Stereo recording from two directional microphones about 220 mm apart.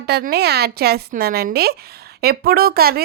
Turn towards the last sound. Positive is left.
turn(degrees=-45)  # may be behind; listen again after turning